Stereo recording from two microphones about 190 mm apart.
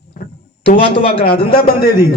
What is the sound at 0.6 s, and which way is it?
Speech, 30° left (ahead or behind).